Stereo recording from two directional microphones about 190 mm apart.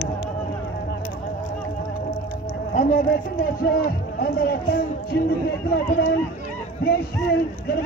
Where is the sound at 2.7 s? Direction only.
45° left (ahead or behind).